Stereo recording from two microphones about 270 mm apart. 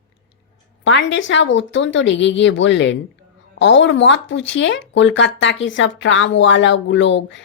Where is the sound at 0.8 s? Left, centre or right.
Left.